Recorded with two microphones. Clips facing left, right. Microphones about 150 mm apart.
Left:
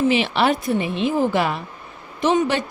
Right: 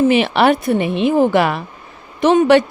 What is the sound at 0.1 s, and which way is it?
A woman's voice, 60° right (ahead or behind).